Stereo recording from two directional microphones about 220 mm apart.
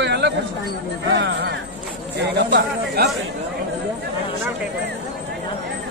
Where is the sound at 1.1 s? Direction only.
50° right (ahead or behind).